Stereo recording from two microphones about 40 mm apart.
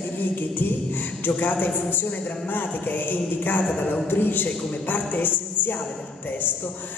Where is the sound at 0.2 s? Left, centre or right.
Left.